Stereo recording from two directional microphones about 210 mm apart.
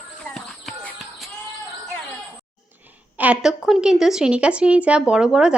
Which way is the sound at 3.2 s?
5° right (ahead or behind).